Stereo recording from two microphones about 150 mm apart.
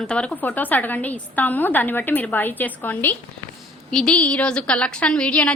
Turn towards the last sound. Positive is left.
turn(degrees=5)  # may be behind; listen again after turning